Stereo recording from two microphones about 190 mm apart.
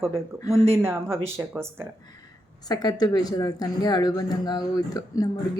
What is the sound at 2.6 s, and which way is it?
A woman's voice, 20° left (ahead or behind).